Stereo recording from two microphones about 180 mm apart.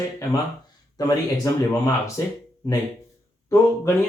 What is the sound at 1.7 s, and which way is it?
Speech, 15° left (ahead or behind).